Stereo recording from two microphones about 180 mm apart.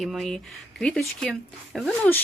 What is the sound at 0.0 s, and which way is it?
Speech, centre (ahead or behind).